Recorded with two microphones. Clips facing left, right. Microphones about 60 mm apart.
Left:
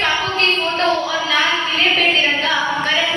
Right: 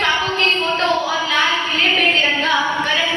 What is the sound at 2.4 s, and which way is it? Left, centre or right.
Female singing, left.